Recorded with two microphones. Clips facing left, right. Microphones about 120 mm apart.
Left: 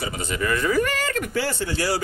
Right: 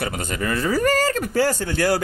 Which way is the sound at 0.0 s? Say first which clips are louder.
Right 1 dB; 45° right (ahead or behind).